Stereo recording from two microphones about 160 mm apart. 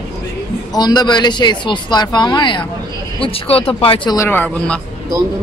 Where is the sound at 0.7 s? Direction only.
25° left (ahead or behind).